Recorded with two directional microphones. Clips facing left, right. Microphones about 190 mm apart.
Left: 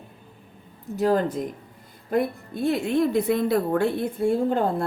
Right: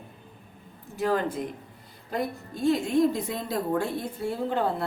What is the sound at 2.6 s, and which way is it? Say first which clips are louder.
A woman's voice: even; 65° left (ahead or behind).